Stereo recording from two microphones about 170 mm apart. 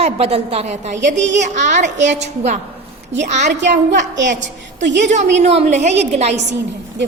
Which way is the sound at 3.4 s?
90° right.